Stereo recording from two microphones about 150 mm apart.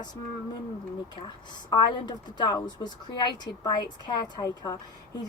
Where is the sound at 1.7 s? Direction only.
30° left (ahead or behind).